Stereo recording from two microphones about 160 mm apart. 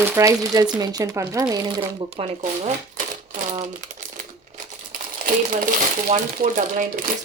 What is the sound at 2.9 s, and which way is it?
Typewriter, 55° right (ahead or behind).